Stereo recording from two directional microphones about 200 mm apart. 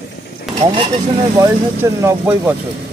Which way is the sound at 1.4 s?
15° right (ahead or behind).